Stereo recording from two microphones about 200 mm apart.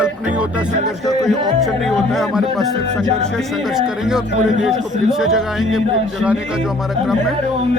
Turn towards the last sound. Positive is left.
turn(degrees=0)  # may be behind; listen again after turning